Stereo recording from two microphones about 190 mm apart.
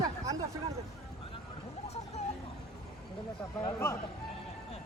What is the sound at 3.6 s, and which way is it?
Speech, 15° left (ahead or behind).